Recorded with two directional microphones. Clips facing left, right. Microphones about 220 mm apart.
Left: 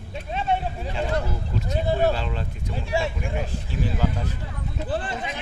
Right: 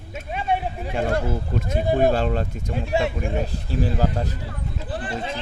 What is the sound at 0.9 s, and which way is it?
Speech, 50° right (ahead or behind).